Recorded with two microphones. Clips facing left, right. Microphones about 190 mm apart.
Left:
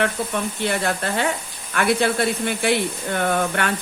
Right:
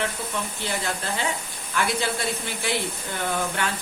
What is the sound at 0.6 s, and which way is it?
Speech, 60° left (ahead or behind).